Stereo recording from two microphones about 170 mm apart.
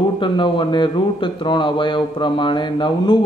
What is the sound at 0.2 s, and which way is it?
A man's voice, 30° left (ahead or behind).